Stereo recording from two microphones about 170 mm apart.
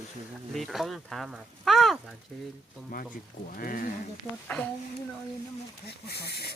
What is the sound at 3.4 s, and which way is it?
Speech, 55° left (ahead or behind).